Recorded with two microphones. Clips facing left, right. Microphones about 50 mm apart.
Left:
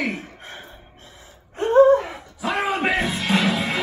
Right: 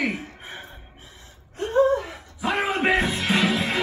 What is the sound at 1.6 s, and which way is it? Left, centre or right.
Gasp, left.